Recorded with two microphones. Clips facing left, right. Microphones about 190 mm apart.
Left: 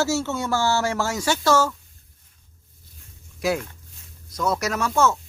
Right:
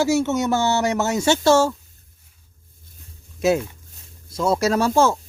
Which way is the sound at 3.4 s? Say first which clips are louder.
Right 5 dB; 20° right (ahead or behind).